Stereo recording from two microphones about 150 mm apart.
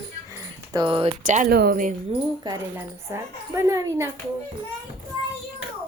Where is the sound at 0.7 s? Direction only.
30° right (ahead or behind).